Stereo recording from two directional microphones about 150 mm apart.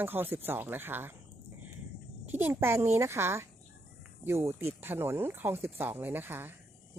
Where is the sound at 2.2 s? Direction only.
15° right (ahead or behind).